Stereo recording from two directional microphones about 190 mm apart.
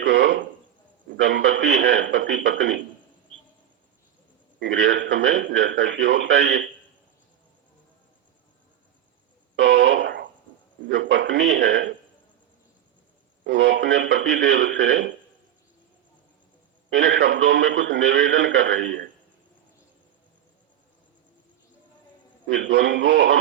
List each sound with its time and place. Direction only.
0.0 s a sound: 70° right (ahead or behind)
1.1 s a man's voice: 70° right (ahead or behind)
4.6 s a man's voice: 75° right (ahead or behind)
9.6 s a sound: 70° right (ahead or behind)
10.8 s a man's voice: 70° right (ahead or behind)
13.4 s a man's voice: 70° right (ahead or behind)
16.9 s a man's voice: 75° right (ahead or behind)
22.4 s a man's voice: 75° right (ahead or behind)